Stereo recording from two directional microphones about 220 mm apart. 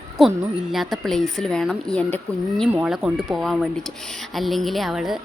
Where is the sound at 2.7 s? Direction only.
5° right (ahead or behind).